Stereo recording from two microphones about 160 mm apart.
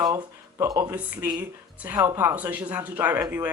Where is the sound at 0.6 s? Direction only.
20° right (ahead or behind).